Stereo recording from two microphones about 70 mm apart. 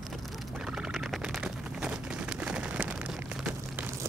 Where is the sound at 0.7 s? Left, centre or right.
Centre.